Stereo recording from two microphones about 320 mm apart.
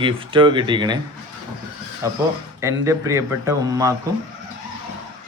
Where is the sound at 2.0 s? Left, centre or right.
Centre.